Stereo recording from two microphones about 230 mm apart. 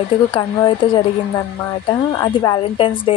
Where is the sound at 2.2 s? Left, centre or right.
Centre.